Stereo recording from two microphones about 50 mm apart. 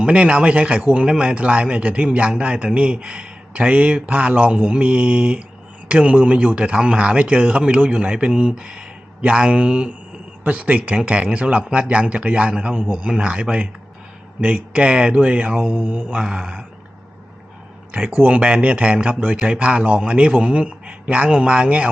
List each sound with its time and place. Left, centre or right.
0.0 s speech: right
16.0 s mantra: centre
18.3 s speech: right